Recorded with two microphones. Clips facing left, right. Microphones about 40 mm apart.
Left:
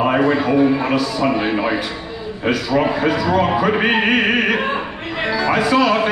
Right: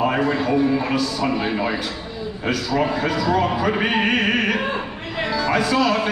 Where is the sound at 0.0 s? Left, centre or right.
Centre.